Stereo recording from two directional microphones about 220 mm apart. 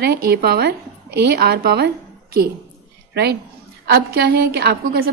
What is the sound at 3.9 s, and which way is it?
A woman's voice, 45° right (ahead or behind).